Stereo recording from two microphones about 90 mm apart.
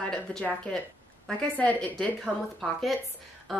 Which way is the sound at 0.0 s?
10° left (ahead or behind).